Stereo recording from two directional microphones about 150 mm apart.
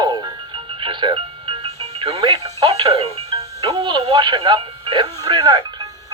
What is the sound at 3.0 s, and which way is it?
Music, 40° right (ahead or behind).